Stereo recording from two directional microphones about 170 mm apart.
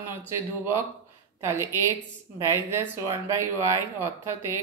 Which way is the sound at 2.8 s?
15° right (ahead or behind).